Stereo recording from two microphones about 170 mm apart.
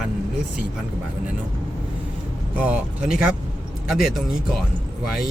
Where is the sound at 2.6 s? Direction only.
5° right (ahead or behind).